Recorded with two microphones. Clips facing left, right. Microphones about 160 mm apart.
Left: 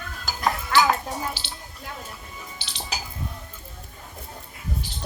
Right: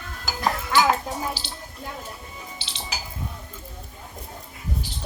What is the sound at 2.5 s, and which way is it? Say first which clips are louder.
Music: right 1 dB; 30° right (ahead or behind).